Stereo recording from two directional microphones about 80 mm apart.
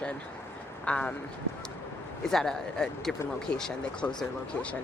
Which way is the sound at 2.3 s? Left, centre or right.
Centre.